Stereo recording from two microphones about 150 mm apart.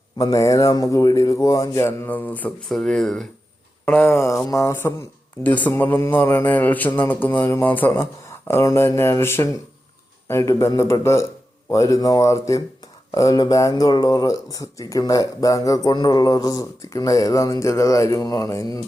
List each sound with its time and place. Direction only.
0.2 s speech: 20° left (ahead or behind); by 3.2 s 5° left (ahead or behind)
3.8 s speech: 15° left (ahead or behind)